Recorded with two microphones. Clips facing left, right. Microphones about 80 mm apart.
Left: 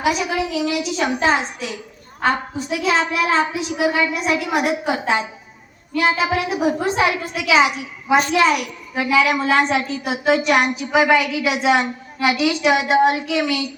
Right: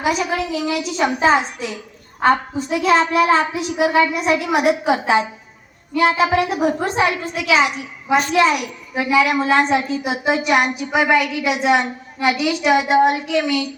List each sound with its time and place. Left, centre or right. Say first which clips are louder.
0.0 s a child's voice: even; centre
8.3 s a child's voice: right 1 dB; centre